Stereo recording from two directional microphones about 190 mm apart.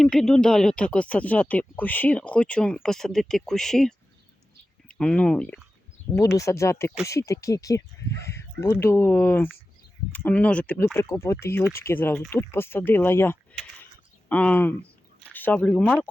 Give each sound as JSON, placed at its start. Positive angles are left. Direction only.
{"t": 0.0, "sound": "speech", "side_deg": 5}